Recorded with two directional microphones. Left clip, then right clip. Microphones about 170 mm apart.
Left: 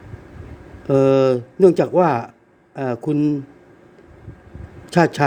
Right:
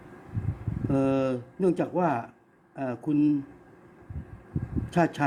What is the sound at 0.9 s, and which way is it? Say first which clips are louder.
Speech: left 12 dB; 50° left (ahead or behind).